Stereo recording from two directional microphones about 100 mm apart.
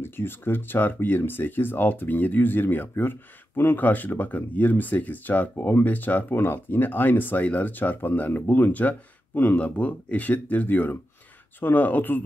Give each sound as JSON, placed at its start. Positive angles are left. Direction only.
{"t": 0.0, "sound": "speech", "side_deg": 20}